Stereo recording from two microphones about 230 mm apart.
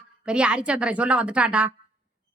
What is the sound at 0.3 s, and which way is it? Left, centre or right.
Speech, centre.